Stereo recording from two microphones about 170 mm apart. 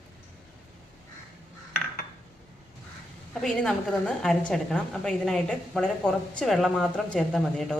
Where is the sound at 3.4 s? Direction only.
5° left (ahead or behind).